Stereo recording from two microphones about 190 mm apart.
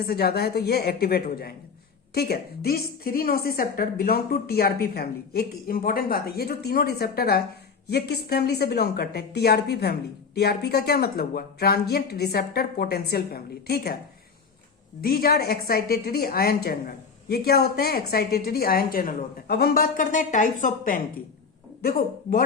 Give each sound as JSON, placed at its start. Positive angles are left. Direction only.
{"t": 0.0, "sound": "a woman's voice", "side_deg": 55}
{"t": 15.0, "sound": "a woman's voice", "side_deg": 55}